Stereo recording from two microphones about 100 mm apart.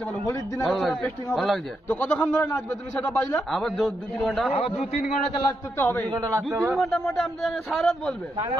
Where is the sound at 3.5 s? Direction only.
Centre (ahead or behind).